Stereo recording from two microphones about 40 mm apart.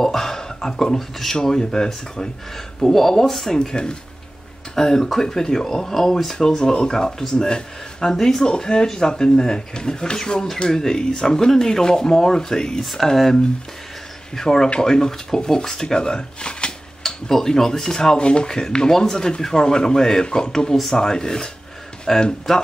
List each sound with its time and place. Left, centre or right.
0.0 s speech: centre
3.5 s speech: centre
6.3 s speech: centre
17.0 s speech: centre
18.1 s speech: left